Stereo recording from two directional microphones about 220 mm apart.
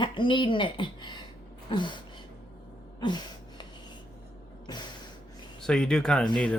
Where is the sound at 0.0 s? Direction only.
20° left (ahead or behind).